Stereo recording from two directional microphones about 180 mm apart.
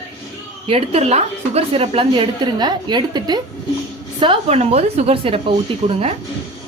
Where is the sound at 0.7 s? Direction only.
35° right (ahead or behind).